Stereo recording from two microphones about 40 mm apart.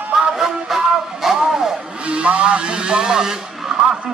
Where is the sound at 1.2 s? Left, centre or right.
Centre.